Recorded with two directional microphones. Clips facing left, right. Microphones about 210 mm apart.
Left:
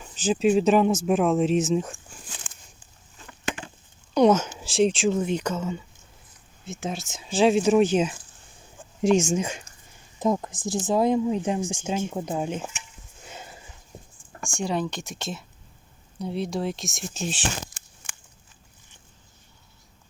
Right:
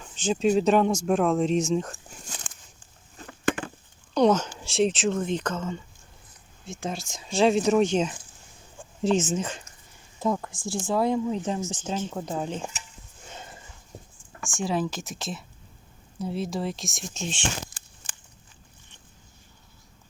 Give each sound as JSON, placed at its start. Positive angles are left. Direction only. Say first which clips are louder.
{"t": 0.0, "sound": "speech", "louder": "left 2 dB", "side_deg": 5}
{"t": 2.2, "sound": "a sound", "louder": "right 2 dB", "side_deg": -40}
{"t": 4.1, "sound": "speech", "louder": "left 2 dB", "side_deg": 10}
{"t": 14.6, "sound": "speech", "louder": "even", "side_deg": 0}